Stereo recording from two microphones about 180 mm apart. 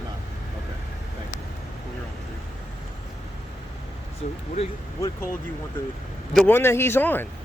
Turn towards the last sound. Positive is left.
turn(degrees=10)  # may be behind; listen again after turning